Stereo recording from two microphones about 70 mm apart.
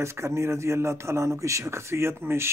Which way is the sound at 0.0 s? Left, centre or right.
Right.